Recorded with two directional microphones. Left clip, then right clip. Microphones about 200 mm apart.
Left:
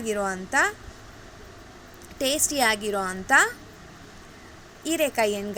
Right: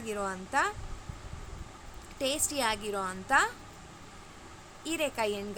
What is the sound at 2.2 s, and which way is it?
A woman's voice, 15° left (ahead or behind).